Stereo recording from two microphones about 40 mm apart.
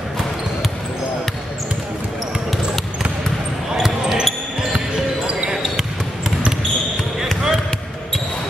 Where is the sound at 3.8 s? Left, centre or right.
Centre.